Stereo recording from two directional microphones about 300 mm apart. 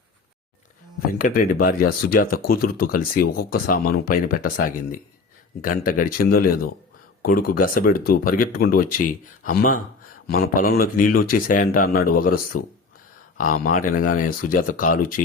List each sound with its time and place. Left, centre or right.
1.2 s speech: left